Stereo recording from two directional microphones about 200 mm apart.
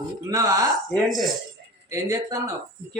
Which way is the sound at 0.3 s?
15° right (ahead or behind).